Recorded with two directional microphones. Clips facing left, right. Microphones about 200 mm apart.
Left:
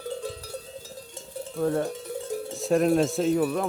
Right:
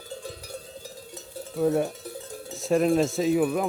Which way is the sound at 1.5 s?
10° right (ahead or behind).